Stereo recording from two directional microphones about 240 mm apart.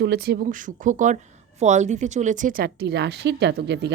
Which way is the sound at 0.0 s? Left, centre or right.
Right.